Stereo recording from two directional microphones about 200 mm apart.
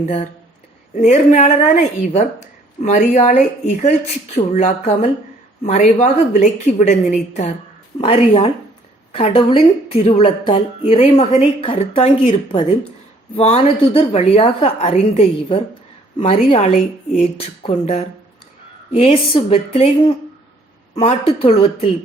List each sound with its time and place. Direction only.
0.9 s a woman's voice: 35° left (ahead or behind)